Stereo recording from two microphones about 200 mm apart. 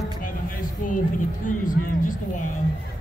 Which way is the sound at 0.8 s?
40° left (ahead or behind).